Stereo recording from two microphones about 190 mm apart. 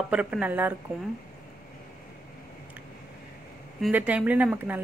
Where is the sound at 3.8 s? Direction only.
5° right (ahead or behind).